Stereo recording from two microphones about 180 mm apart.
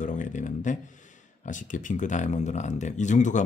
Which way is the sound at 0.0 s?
45° left (ahead or behind).